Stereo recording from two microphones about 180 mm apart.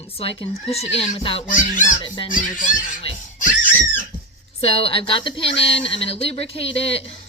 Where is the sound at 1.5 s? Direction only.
45° left (ahead or behind).